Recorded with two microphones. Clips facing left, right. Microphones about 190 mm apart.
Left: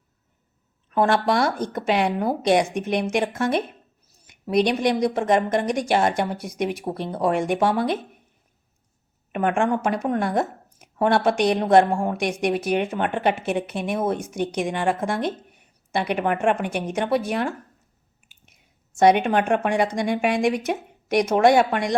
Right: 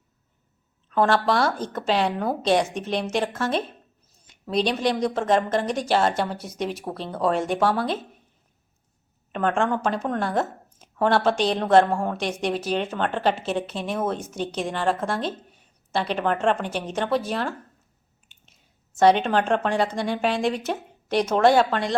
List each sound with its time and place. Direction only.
0.9 s a woman's voice: 15° left (ahead or behind)
9.3 s a woman's voice: 10° left (ahead or behind)
18.9 s a woman's voice: 15° left (ahead or behind)